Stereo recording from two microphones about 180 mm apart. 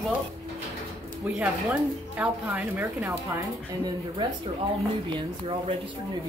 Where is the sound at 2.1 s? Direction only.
10° right (ahead or behind).